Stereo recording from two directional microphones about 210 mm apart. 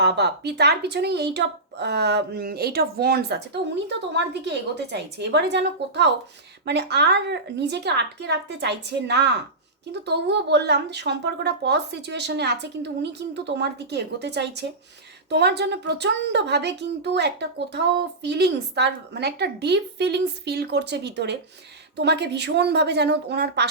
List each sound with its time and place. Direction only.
0.0 s a woman's voice: 55° right (ahead or behind)